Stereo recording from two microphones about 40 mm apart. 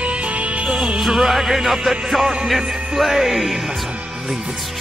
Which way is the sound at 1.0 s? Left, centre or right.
Centre.